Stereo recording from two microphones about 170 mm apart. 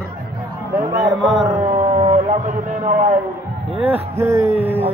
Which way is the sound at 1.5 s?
50° right (ahead or behind).